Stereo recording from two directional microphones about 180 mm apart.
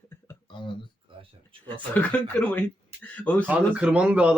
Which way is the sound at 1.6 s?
10° left (ahead or behind).